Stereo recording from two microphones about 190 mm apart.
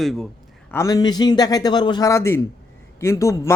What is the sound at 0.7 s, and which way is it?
A man's voice, 20° left (ahead or behind).